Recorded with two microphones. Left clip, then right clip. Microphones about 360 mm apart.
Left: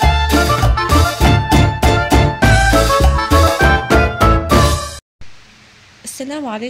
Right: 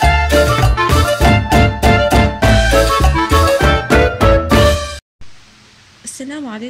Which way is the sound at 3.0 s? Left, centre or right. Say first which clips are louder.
Even; centre.